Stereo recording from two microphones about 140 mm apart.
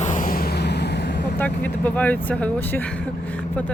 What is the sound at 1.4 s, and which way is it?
Speech, 10° left (ahead or behind).